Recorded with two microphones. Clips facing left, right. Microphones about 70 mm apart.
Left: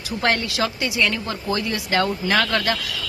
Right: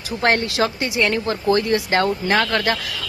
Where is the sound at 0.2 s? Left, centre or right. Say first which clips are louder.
Right 3 dB; right.